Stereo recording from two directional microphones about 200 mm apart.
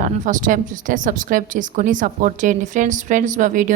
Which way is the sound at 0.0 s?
40° right (ahead or behind).